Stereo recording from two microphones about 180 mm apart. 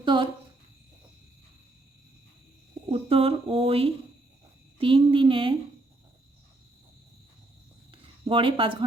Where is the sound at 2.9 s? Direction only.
30° right (ahead or behind).